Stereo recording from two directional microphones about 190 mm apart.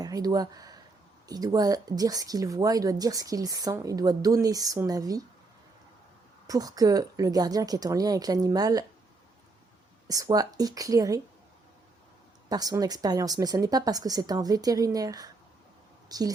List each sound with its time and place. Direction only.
0.0 s speech: 20° right (ahead or behind)
6.5 s speech: 20° right (ahead or behind)
10.1 s speech: 20° right (ahead or behind)
12.5 s speech: 20° right (ahead or behind)